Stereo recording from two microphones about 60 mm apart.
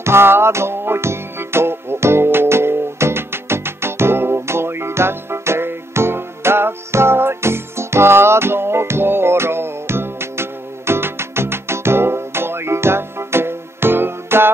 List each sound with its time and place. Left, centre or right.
0.0 s music: right